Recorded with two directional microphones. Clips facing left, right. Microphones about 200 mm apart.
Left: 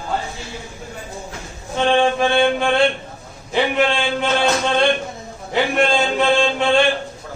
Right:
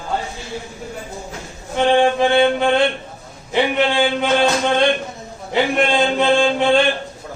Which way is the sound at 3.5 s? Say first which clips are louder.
Right 1 dB; 15° right (ahead or behind).